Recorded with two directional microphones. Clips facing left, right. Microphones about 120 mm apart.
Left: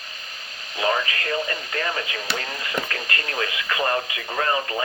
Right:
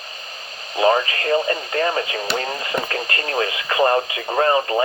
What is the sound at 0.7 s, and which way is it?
Speech, 35° right (ahead or behind).